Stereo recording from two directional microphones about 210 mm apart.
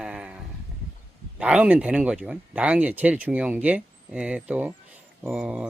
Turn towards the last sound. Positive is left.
turn(degrees=-5)  # may be behind; listen again after turning